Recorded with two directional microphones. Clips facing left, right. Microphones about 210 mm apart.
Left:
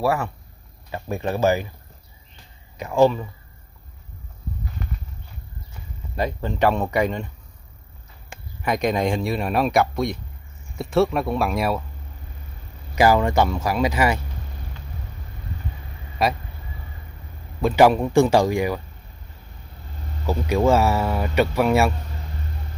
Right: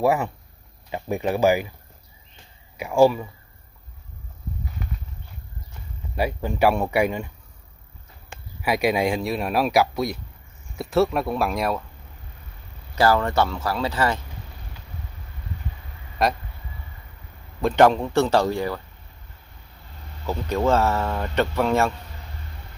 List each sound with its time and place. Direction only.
0.0 s speech: 15° right (ahead or behind)
2.8 s speech: 10° right (ahead or behind)
6.1 s speech: 10° right (ahead or behind)
8.6 s speech: 5° right (ahead or behind)
12.9 s speech: 15° left (ahead or behind)
16.2 s speech: centre (ahead or behind)
17.6 s speech: 5° left (ahead or behind)
20.2 s speech: 10° left (ahead or behind)